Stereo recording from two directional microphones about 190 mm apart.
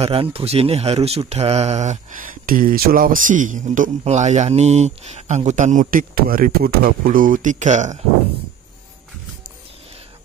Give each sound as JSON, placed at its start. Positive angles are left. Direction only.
{"t": 0.0, "sound": "speech", "side_deg": -30}